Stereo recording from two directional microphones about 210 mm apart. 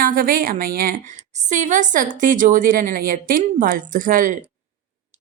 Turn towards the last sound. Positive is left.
turn(degrees=-40)  # may be behind; listen again after turning